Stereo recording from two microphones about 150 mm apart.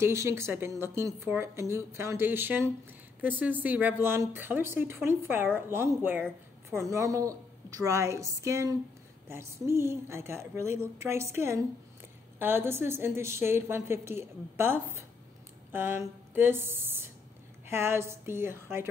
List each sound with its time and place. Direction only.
0.0 s a woman's voice: 20° right (ahead or behind)